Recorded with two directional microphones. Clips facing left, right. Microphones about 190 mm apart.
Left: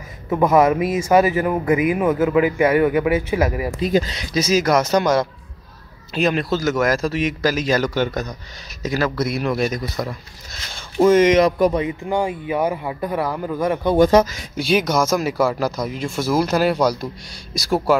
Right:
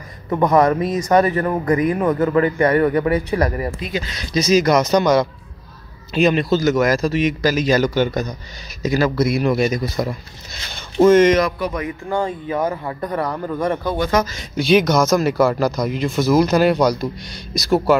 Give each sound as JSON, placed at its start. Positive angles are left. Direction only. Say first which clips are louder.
{"t": 0.3, "sound": "speech", "louder": "even", "side_deg": 5}
{"t": 3.8, "sound": "speech", "louder": "left 7 dB", "side_deg": 35}
{"t": 4.3, "sound": "a man's voice", "louder": "right 3 dB", "side_deg": 5}